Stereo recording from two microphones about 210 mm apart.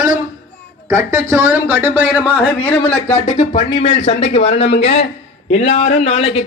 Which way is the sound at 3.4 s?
30° left (ahead or behind).